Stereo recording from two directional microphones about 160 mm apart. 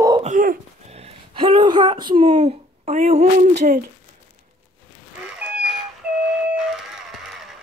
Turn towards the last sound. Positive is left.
turn(degrees=0)  # may be behind; listen again after turning